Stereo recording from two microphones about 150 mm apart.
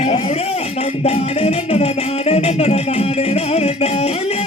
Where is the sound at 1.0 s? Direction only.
45° left (ahead or behind).